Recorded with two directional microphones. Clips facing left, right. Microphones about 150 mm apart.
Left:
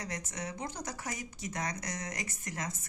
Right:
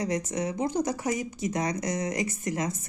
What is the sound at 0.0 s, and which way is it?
Speech, 20° right (ahead or behind).